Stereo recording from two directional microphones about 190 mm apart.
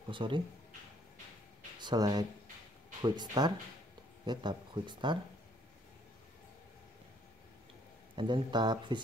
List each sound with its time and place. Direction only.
0.1 s speech: 25° right (ahead or behind)
1.8 s speech: 20° right (ahead or behind)
8.2 s speech: 25° right (ahead or behind)